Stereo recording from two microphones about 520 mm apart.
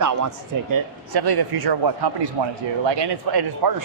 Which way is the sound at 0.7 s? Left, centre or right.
Right.